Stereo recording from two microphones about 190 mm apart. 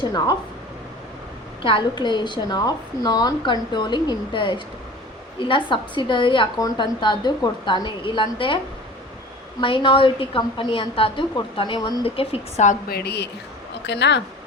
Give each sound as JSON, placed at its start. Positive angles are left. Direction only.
{"t": 0.0, "sound": "a woman's voice", "side_deg": 20}
{"t": 1.6, "sound": "a woman's voice", "side_deg": 25}
{"t": 9.6, "sound": "a woman's voice", "side_deg": 25}
{"t": 12.9, "sound": "speech", "side_deg": 55}